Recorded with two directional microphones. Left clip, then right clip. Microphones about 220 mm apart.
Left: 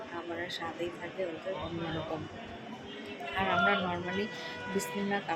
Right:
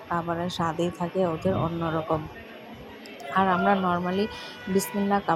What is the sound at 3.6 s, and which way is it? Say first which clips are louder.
Speech: right 6 dB; 25° right (ahead or behind).